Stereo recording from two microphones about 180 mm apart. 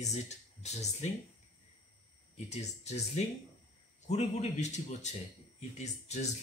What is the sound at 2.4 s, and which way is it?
Speech, 40° left (ahead or behind).